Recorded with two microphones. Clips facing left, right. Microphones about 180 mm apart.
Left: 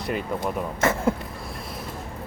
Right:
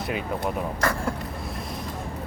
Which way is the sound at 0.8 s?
25° left (ahead or behind).